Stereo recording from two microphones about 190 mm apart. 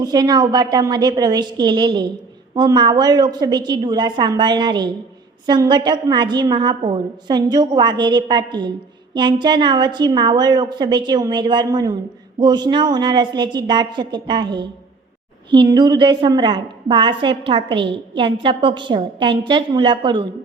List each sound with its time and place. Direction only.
0.0 s a woman's voice: 20° right (ahead or behind)